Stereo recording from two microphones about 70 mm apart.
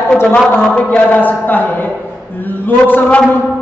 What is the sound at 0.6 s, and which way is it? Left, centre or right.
Speech, centre.